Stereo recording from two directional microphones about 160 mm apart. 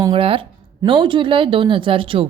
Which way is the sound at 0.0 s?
35° right (ahead or behind).